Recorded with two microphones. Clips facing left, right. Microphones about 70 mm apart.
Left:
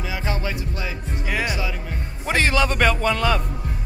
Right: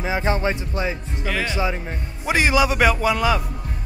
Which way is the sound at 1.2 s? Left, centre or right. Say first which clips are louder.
Even; centre.